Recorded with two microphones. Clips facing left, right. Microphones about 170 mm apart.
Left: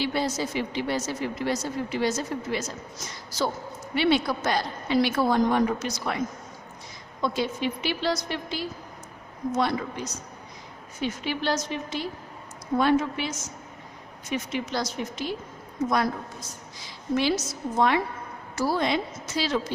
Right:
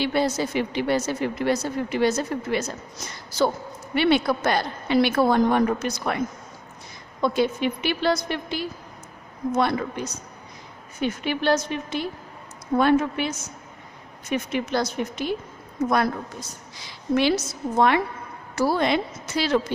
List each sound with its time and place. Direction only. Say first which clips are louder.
0.0 s a woman's voice: right 4 dB; 60° right (ahead or behind)